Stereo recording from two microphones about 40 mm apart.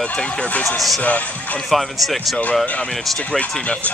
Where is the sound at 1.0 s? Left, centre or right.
Left.